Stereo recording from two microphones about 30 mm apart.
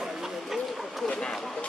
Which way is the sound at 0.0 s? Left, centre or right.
Centre.